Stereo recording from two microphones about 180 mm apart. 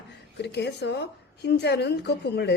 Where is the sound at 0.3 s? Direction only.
70° left (ahead or behind).